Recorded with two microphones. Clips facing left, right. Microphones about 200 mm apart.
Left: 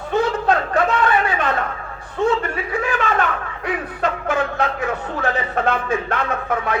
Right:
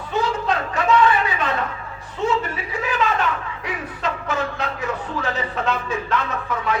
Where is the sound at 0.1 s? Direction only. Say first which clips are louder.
Left 4 dB; 55° left (ahead or behind).